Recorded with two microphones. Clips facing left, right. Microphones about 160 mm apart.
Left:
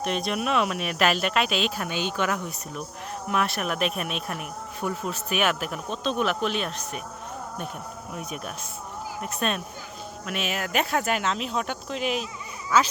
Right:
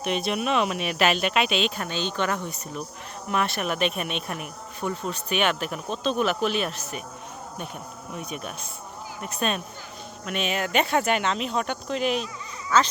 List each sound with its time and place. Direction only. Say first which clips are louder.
0.0 s speech: right 1 dB; centre (ahead or behind)
8.1 s speech: right 1 dB; centre (ahead or behind)